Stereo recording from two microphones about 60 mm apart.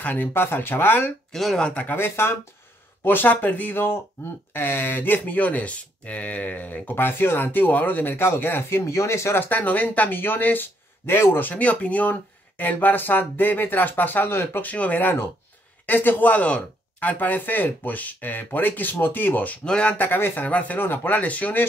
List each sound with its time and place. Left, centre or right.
0.0 s speech: left
0.3 s speech: left
1.3 s speech: centre
1.6 s speech: left
9.5 s speech: left
11.4 s speech: left
14.6 s speech: left
20.0 s speech: left
20.4 s speech: left